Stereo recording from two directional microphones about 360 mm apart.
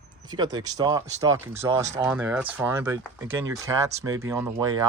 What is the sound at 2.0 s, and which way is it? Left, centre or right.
Speech, centre.